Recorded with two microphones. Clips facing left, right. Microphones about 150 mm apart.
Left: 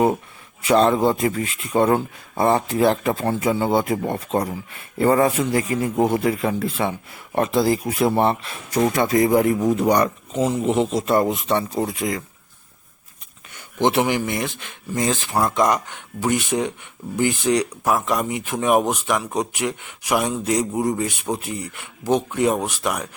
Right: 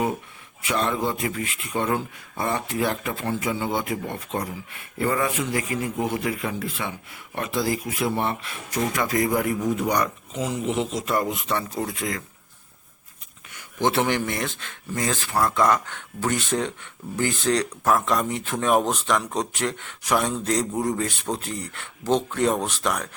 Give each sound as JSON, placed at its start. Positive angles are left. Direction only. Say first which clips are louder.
{"t": 0.6, "sound": "speech", "louder": "left 8 dB", "side_deg": 35}
{"t": 13.5, "sound": "speech", "louder": "left 4 dB", "side_deg": 25}